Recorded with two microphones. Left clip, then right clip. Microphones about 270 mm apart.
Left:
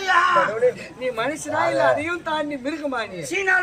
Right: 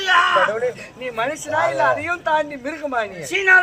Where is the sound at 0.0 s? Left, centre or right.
Centre.